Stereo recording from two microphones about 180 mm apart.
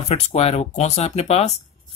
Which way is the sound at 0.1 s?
35° left (ahead or behind).